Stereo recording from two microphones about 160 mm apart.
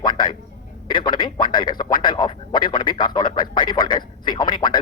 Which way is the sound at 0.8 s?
30° left (ahead or behind).